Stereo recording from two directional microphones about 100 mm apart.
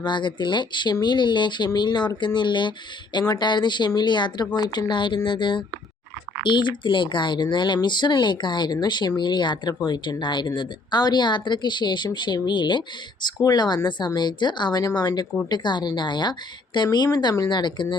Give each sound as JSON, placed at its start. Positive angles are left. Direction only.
{"t": 0.0, "sound": "speech", "side_deg": 50}